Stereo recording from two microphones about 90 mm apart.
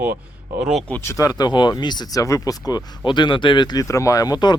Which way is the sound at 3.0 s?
60° left (ahead or behind).